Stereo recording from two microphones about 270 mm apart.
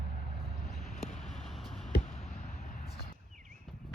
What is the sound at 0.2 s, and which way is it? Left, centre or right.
Vehicle, left.